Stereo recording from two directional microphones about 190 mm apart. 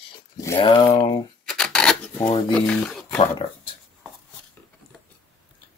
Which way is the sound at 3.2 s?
25° left (ahead or behind).